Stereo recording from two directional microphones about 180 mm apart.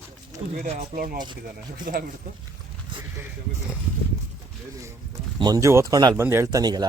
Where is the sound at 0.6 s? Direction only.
45° right (ahead or behind).